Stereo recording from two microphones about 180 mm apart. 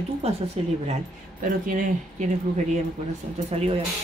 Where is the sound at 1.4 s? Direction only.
45° right (ahead or behind).